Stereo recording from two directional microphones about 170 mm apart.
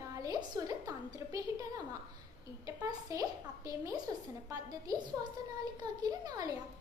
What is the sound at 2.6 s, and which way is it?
A woman's voice, 20° right (ahead or behind).